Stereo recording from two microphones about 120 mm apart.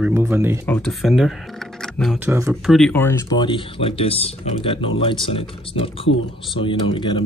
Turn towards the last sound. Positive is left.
turn(degrees=45)  # may be behind; listen again after turning